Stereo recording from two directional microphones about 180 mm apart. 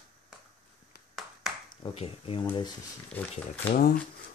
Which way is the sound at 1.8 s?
30° left (ahead or behind).